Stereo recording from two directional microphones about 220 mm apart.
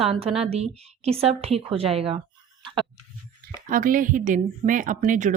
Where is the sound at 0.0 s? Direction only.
25° right (ahead or behind).